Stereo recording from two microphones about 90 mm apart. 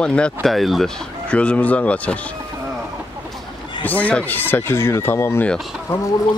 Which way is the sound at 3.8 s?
20° left (ahead or behind).